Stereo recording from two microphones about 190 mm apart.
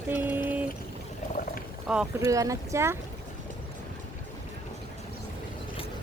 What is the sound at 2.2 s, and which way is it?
Speech, 15° right (ahead or behind).